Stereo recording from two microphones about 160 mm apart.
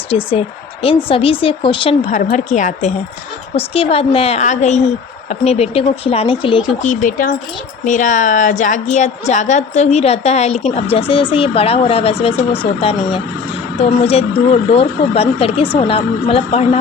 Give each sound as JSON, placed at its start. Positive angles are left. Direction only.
{"t": 0.1, "sound": "speech", "side_deg": 35}
{"t": 2.0, "sound": "a woman's voice", "side_deg": 45}
{"t": 3.5, "sound": "speech", "side_deg": 35}
{"t": 6.8, "sound": "a woman's voice", "side_deg": 50}